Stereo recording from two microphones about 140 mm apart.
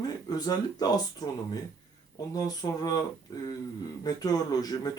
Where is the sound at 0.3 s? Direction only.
30° left (ahead or behind).